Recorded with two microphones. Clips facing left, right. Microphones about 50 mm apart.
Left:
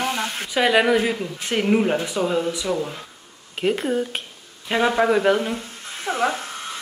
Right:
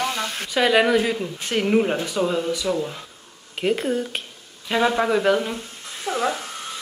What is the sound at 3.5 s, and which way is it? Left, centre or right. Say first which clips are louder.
Speech: even; centre.